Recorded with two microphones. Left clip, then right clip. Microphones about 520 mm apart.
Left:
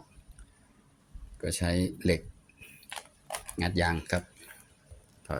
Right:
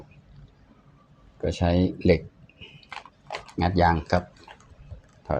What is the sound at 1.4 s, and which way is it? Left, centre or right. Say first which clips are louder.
Speech: right 7 dB; left.